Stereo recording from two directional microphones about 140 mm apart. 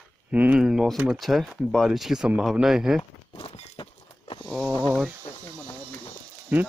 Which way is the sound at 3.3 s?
40° left (ahead or behind).